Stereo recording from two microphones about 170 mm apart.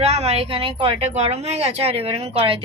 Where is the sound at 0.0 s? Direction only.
40° right (ahead or behind).